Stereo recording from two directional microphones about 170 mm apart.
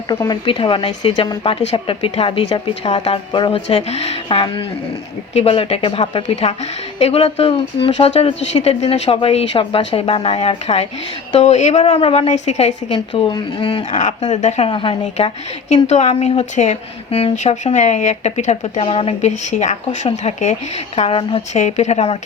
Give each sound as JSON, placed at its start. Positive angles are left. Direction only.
{"t": 0.1, "sound": "a woman's voice", "side_deg": 25}
{"t": 13.1, "sound": "speech", "side_deg": 30}
{"t": 13.9, "sound": "a woman's voice", "side_deg": 45}
{"t": 15.7, "sound": "a woman's voice", "side_deg": 40}